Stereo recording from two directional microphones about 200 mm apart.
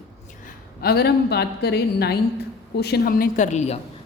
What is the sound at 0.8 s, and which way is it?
Speech, 50° left (ahead or behind).